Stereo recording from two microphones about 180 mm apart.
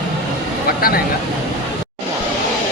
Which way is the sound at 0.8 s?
55° left (ahead or behind).